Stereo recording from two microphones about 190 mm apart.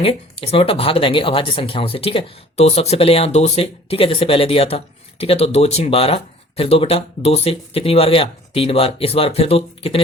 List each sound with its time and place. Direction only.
0.0 s speech: 30° left (ahead or behind)